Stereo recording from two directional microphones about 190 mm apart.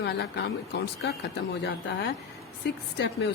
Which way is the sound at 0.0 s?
60° left (ahead or behind).